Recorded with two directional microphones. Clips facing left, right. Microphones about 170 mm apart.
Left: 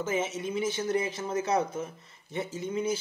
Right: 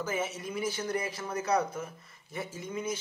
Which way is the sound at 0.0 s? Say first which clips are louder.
Left 3 dB; 25° left (ahead or behind).